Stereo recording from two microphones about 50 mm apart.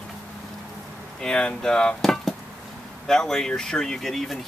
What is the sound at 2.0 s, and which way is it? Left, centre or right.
Chop, centre.